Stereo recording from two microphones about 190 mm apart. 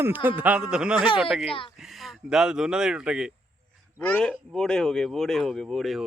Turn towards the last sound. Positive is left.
turn(degrees=0)  # may be behind; listen again after turning